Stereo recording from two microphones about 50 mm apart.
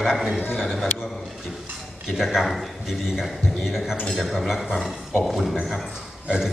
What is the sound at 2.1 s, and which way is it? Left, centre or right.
A man's voice, centre.